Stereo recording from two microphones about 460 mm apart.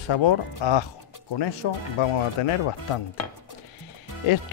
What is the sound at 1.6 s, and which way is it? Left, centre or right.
Speech, left.